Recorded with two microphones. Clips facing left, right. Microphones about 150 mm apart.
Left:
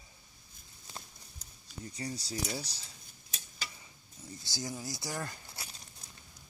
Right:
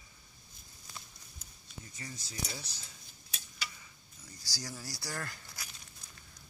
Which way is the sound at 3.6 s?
30° left (ahead or behind).